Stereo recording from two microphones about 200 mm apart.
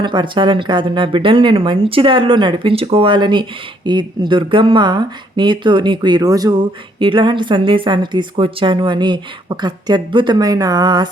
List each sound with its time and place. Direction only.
0.0 s a woman's voice: 25° right (ahead or behind)